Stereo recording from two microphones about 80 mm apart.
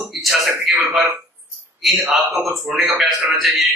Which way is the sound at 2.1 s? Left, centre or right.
Centre.